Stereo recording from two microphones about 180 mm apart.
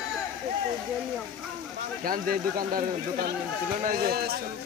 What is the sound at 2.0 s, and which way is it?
Speech, 50° right (ahead or behind).